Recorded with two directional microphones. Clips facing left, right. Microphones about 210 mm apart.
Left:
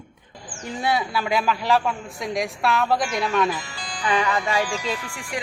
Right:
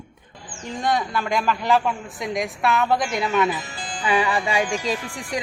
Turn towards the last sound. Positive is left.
turn(degrees=-35)  # may be behind; listen again after turning